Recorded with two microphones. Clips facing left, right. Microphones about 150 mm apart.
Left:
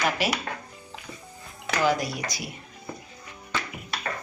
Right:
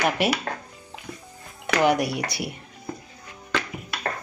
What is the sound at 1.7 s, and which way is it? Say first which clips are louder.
Speech: right 4 dB; 65° right (ahead or behind).